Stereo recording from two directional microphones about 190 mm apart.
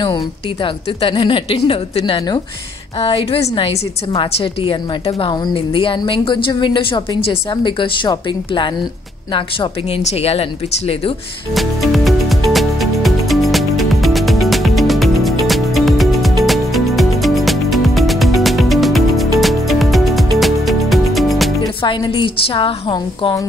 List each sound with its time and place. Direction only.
0.0 s a woman's voice: 25° left (ahead or behind)
11.5 s music: centre (ahead or behind)
21.8 s a woman's voice: 25° left (ahead or behind)